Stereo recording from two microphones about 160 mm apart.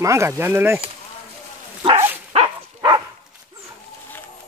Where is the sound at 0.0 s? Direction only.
20° right (ahead or behind).